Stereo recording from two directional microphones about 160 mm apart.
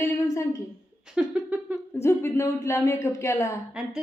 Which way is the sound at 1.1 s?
5° right (ahead or behind).